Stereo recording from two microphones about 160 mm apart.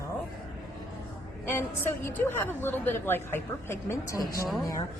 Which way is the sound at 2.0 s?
15° left (ahead or behind).